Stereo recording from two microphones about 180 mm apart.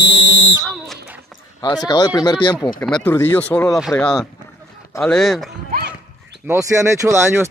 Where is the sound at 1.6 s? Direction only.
20° left (ahead or behind).